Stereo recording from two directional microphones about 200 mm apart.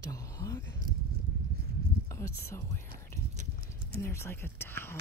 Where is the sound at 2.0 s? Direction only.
15° left (ahead or behind).